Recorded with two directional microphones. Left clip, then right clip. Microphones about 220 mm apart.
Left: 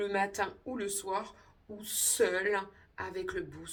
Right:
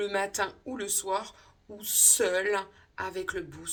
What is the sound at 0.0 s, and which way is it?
A woman's voice, 15° right (ahead or behind).